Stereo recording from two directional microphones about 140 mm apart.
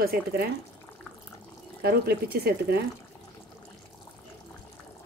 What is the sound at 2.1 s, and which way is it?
Speech, 90° right.